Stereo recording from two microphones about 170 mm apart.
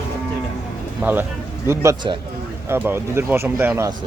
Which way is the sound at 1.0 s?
10° right (ahead or behind).